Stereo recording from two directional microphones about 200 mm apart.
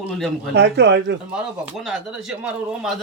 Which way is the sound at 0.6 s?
55° right (ahead or behind).